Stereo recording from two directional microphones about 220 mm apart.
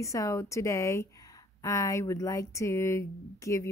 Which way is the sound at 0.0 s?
15° left (ahead or behind).